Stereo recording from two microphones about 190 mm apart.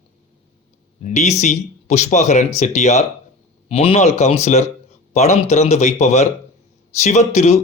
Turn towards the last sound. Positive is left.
turn(degrees=35)  # may be behind; listen again after turning